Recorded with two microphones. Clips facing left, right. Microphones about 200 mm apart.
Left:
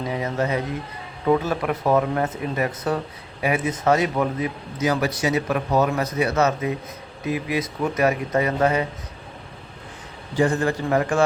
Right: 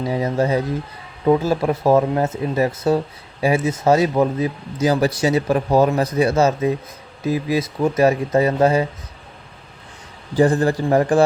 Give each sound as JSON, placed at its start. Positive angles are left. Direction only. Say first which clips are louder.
{"t": 0.0, "sound": "speech", "louder": "right 5 dB", "side_deg": -30}
{"t": 10.3, "sound": "speech", "louder": "right 5 dB", "side_deg": -35}